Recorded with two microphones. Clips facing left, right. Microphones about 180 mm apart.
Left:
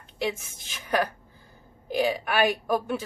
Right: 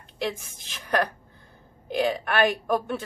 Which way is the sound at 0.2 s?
Centre (ahead or behind).